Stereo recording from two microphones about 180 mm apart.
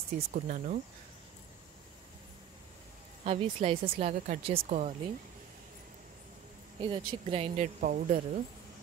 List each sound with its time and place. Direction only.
0.3 s speech: 50° right (ahead or behind)
3.3 s speech: 30° right (ahead or behind)
6.8 s speech: 25° right (ahead or behind); by 8.2 s 45° right (ahead or behind)